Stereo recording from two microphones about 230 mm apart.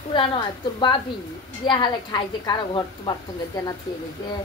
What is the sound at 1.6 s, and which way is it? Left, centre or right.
A woman's voice, centre.